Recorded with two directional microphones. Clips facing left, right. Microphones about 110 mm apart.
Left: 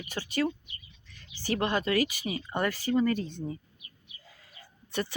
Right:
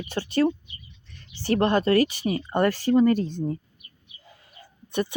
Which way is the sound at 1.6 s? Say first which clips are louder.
Right 7 dB; 40° right (ahead or behind).